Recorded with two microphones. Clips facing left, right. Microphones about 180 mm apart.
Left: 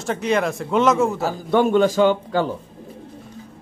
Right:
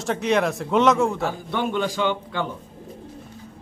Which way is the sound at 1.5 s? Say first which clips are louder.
Left 11 dB; 45° left (ahead or behind).